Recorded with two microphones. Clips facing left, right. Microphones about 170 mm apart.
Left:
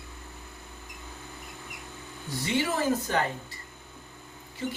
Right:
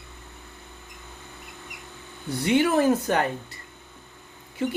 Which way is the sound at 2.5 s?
60° right (ahead or behind).